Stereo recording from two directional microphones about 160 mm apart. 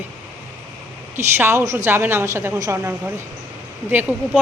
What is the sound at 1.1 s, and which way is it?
A woman's voice, 15° right (ahead or behind).